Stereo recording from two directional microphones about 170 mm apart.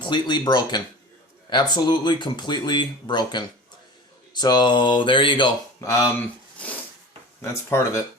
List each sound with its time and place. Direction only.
0.0 s speech: 25° left (ahead or behind)
6.1 s a sound: 10° left (ahead or behind)
7.4 s speech: 15° left (ahead or behind)